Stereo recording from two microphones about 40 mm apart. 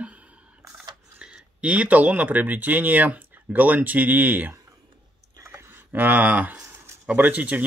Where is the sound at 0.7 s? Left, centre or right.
Right.